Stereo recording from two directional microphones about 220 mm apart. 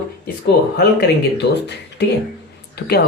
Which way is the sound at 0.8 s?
50° left (ahead or behind).